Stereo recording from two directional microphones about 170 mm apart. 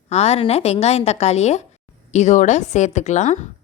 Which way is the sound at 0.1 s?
40° left (ahead or behind).